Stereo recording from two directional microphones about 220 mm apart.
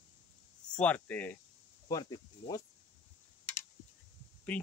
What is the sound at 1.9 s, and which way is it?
Speech, 20° left (ahead or behind).